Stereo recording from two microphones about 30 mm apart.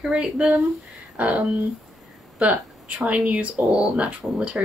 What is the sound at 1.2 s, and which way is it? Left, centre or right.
Speech, right.